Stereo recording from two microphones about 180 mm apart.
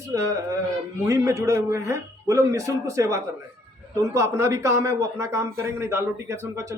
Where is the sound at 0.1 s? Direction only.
20° right (ahead or behind).